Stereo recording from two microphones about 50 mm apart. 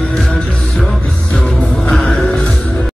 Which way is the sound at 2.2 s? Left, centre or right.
Left.